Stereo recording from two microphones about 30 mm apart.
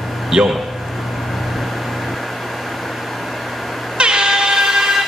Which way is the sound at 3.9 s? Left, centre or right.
Right.